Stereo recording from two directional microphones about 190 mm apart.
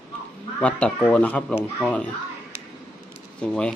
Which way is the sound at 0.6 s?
5° left (ahead or behind).